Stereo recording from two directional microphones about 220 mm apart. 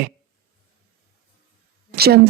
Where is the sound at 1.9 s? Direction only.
45° right (ahead or behind).